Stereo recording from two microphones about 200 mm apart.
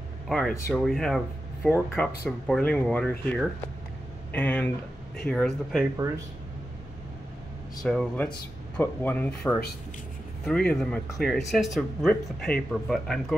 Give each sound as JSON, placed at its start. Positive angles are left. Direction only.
{"t": 0.3, "sound": "speech", "side_deg": 0}
{"t": 5.9, "sound": "speech", "side_deg": -15}
{"t": 7.8, "sound": "speech", "side_deg": 5}